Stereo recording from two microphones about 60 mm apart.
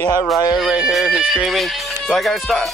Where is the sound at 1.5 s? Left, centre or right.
Centre.